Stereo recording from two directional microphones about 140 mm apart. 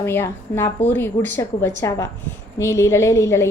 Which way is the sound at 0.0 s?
15° left (ahead or behind).